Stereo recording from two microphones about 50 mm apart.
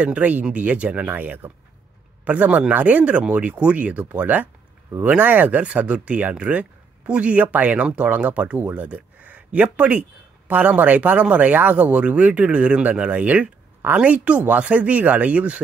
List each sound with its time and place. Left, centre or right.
0.0 s speech: right
1.1 s speech: right
8.5 s speech: right
8.8 s speech: right